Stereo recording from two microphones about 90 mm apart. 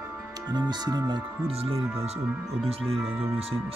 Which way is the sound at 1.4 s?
90° right.